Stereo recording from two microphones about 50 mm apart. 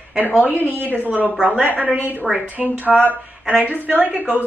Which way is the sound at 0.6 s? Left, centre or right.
Left.